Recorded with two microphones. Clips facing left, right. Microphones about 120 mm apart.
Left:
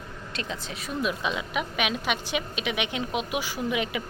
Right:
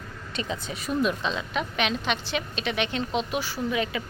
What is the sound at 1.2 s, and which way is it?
A woman's voice, 10° left (ahead or behind).